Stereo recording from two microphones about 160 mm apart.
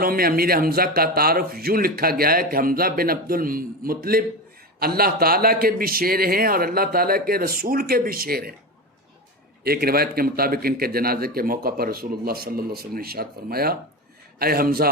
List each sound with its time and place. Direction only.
0.0 s speech: 65° right (ahead or behind)
9.6 s speech: 70° right (ahead or behind)